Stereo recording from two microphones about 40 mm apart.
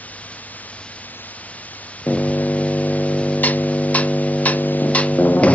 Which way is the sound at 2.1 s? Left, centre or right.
Left.